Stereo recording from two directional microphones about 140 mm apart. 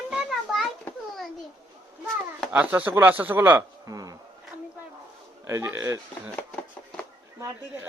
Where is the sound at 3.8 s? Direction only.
25° right (ahead or behind).